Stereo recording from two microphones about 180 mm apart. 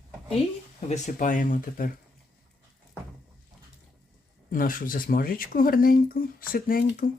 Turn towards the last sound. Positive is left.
turn(degrees=55)  # may be behind; listen again after turning